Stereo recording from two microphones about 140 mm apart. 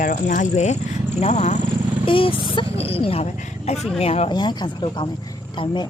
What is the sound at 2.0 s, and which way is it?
Speech, 40° left (ahead or behind).